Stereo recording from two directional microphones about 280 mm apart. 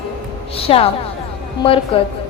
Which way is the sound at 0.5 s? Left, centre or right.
Centre.